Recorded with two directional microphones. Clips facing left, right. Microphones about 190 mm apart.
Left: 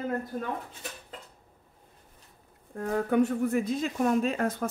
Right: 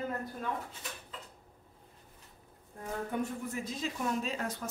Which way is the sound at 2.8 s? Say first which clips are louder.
Left 10 dB; 85° left.